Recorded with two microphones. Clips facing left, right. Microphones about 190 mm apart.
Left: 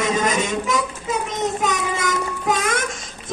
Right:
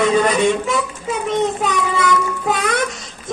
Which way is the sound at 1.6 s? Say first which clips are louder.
Right 3 dB; 45° left (ahead or behind).